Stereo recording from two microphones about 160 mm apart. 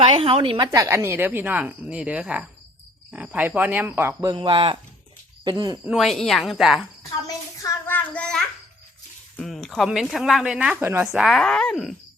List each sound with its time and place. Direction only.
0.0 s a woman's voice: 35° right (ahead or behind); by 4.1 s 15° right (ahead or behind)
4.2 s speech: 25° right (ahead or behind)
5.8 s speech: 5° right (ahead or behind)
7.3 s child singing: 15° left (ahead or behind)
9.4 s speech: centre (ahead or behind)